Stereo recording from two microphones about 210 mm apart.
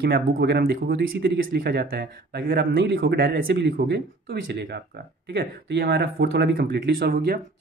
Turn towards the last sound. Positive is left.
turn(degrees=-45)  # may be behind; listen again after turning